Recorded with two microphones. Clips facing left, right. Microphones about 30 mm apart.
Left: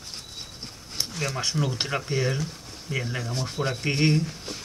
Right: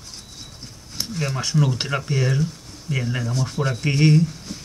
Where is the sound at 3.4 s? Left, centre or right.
Centre.